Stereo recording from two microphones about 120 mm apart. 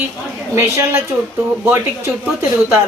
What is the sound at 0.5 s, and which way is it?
Speech, 20° right (ahead or behind).